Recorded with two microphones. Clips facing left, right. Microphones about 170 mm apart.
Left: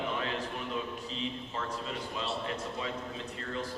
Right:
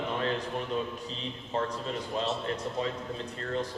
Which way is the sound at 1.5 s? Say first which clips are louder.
Right 10 dB; 40° right (ahead or behind).